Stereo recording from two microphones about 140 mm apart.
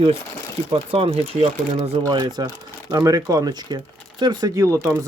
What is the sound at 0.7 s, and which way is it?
Speech, 45° right (ahead or behind).